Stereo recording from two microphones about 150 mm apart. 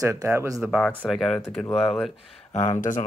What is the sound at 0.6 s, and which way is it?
Speech, 5° right (ahead or behind).